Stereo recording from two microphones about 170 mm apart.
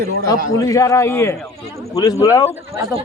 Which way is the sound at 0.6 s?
20° left (ahead or behind).